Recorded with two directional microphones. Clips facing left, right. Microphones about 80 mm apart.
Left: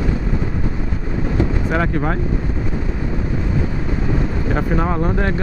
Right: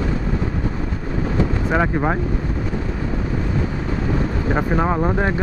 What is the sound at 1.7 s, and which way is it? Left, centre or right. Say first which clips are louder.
Speech: right 1 dB; centre.